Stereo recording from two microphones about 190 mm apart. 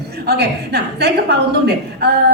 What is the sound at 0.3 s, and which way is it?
A woman's voice, 60° right (ahead or behind).